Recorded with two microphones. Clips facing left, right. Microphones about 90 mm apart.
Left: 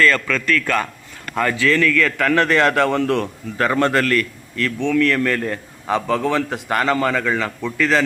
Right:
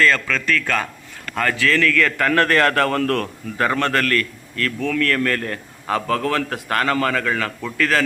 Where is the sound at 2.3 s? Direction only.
10° left (ahead or behind).